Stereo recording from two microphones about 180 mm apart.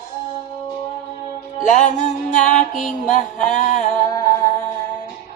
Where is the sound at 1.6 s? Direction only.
45° left (ahead or behind).